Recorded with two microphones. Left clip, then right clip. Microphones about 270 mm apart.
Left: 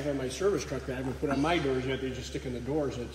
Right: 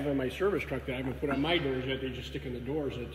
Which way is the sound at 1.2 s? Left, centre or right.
Centre.